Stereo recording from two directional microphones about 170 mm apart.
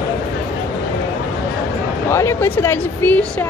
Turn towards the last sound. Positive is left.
turn(degrees=10)  # may be behind; listen again after turning